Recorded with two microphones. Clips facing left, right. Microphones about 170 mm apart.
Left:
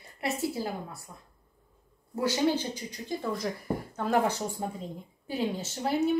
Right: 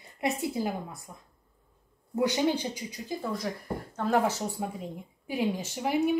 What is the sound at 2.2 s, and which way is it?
Speech, 15° right (ahead or behind).